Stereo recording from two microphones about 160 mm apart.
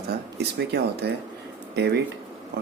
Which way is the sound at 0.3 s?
90° right.